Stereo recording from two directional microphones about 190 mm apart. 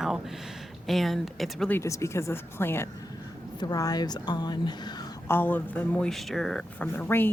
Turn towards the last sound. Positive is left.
turn(degrees=10)  # may be behind; listen again after turning